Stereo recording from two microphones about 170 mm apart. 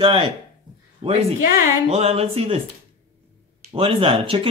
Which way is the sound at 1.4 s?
55° left (ahead or behind).